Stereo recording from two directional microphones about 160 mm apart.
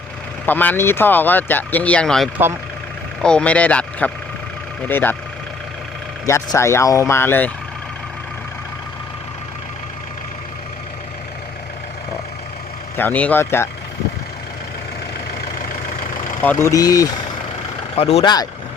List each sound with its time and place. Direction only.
0.4 s speech: 10° left (ahead or behind)
6.2 s speech: 20° left (ahead or behind)
13.0 s speech: 10° left (ahead or behind)
16.4 s speech: 15° left (ahead or behind)
17.9 s speech: 40° left (ahead or behind)
18.2 s speech: 25° left (ahead or behind)